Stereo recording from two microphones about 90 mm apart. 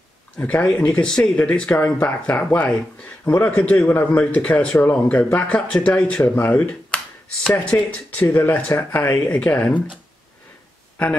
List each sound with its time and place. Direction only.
0.4 s speech: 15° left (ahead or behind)